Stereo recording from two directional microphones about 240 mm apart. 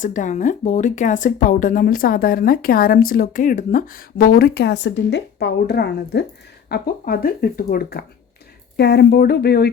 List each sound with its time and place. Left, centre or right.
0.0 s speech: left